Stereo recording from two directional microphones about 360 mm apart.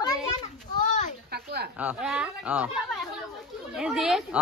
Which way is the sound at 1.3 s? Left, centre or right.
Right.